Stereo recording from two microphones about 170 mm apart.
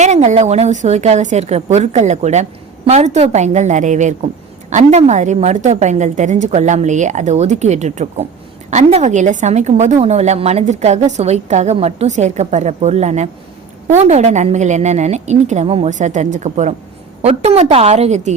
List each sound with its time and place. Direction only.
0.0 s a woman's voice: 45° right (ahead or behind)